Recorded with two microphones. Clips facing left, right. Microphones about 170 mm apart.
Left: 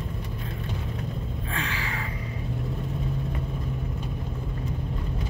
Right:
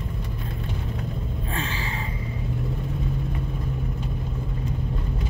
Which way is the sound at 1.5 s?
25° right (ahead or behind).